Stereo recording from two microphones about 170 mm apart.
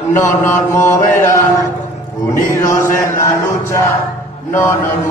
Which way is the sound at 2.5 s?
15° left (ahead or behind).